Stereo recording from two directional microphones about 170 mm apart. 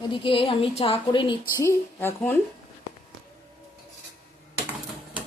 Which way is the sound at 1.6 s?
15° left (ahead or behind).